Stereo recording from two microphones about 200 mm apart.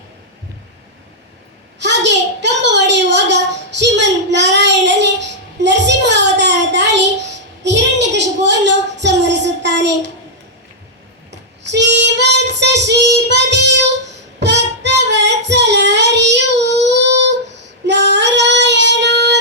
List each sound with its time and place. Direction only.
1.8 s a sound: 60° right (ahead or behind)
11.6 s child singing: 60° right (ahead or behind)
13.2 s music: 60° right (ahead or behind)
14.3 s child singing: 60° right (ahead or behind)